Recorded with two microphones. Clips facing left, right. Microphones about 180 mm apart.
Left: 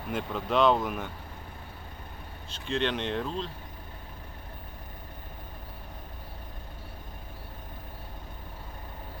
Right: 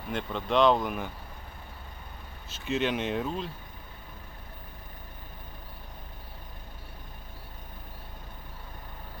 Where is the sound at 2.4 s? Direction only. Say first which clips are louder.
Right 1 dB; 5° right (ahead or behind).